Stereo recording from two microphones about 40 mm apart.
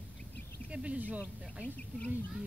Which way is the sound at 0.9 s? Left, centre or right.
Right.